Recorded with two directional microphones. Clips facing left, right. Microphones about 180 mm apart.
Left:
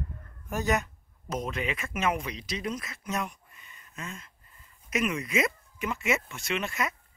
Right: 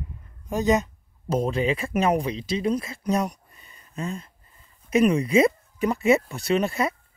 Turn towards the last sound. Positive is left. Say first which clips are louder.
# right 8 dB
turn(degrees=-35)  # may be behind; listen again after turning